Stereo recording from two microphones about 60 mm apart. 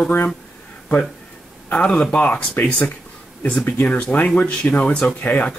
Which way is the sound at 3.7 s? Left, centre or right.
Left.